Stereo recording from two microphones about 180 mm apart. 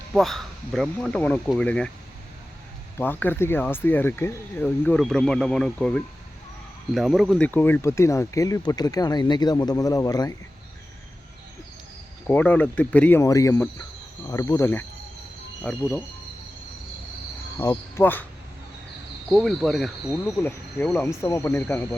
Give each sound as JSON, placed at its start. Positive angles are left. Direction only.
{"t": 0.1, "sound": "speech", "side_deg": 0}
{"t": 3.0, "sound": "speech", "side_deg": 10}
{"t": 12.3, "sound": "speech", "side_deg": 10}
{"t": 17.6, "sound": "speech", "side_deg": 15}
{"t": 19.3, "sound": "speech", "side_deg": 0}